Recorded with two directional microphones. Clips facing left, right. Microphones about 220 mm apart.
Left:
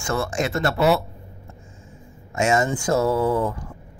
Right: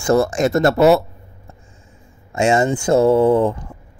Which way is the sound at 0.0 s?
40° right (ahead or behind).